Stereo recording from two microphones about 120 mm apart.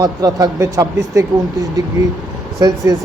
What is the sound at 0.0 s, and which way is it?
Speech, 30° right (ahead or behind).